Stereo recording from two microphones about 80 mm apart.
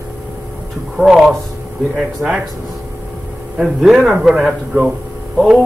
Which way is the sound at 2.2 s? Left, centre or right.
Centre.